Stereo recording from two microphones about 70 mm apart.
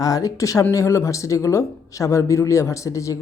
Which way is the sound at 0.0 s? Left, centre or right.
Left.